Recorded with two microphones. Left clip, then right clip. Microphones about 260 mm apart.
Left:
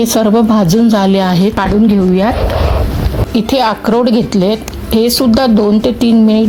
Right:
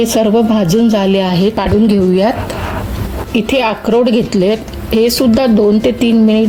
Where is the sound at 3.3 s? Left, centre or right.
Left.